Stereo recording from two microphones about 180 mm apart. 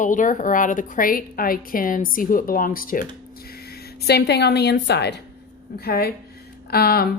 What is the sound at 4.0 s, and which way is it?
A woman's voice, 65° left (ahead or behind).